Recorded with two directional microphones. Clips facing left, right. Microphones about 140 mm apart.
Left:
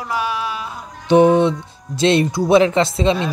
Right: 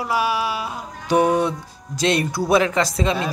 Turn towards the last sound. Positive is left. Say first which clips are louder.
# left 5 dB
turn(degrees=30)  # may be behind; listen again after turning